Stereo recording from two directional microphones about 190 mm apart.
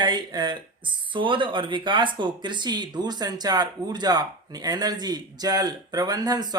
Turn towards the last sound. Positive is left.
turn(degrees=-20)  # may be behind; listen again after turning